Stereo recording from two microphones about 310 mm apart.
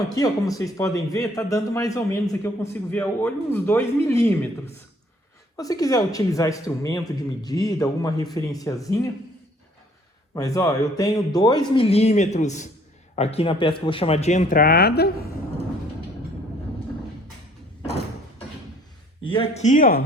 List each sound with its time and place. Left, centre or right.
0.2 s a man's voice: centre
10.3 s a man's voice: centre; by 15.1 s left
19.2 s speech: centre